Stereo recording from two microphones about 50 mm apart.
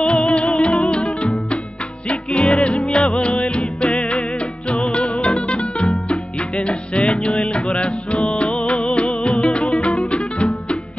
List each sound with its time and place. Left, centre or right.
0.0 s music: centre